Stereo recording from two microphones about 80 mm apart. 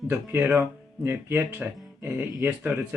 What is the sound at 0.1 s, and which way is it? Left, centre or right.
Speech, right.